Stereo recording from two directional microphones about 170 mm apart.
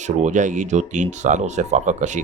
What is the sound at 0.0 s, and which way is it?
Speech, 45° right (ahead or behind).